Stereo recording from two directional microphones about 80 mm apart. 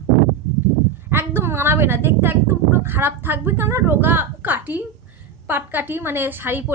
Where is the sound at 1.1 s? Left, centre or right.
Right.